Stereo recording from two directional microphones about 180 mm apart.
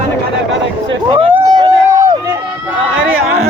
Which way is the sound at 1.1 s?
25° right (ahead or behind).